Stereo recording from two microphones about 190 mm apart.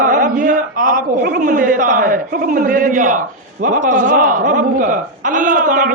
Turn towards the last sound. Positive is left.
turn(degrees=-45)  # may be behind; listen again after turning